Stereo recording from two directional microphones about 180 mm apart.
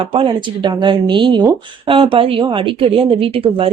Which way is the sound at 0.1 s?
25° right (ahead or behind).